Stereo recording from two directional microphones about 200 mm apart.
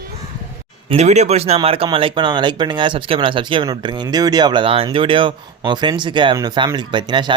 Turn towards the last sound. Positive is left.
turn(degrees=-25)  # may be behind; listen again after turning